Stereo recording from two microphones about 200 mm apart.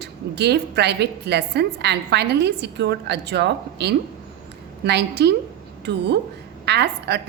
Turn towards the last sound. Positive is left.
turn(degrees=-55)  # may be behind; listen again after turning